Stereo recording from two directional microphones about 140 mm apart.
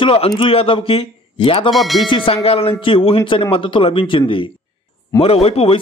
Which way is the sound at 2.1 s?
40° left (ahead or behind).